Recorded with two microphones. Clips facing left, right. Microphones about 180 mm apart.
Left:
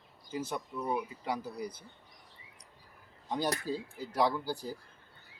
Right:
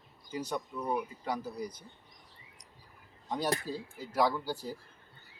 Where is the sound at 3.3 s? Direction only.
Centre (ahead or behind).